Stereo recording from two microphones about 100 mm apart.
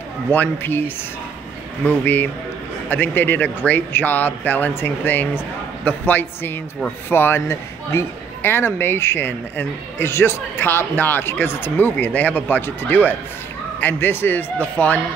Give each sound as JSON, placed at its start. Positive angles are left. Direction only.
{"t": 0.3, "sound": "speech", "side_deg": 20}